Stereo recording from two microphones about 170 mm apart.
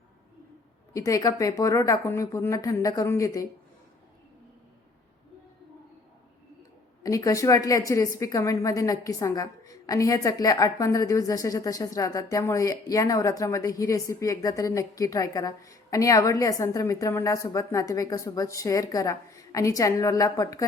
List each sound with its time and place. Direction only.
0.9 s a woman's voice: 20° left (ahead or behind)
7.0 s a woman's voice: 20° left (ahead or behind)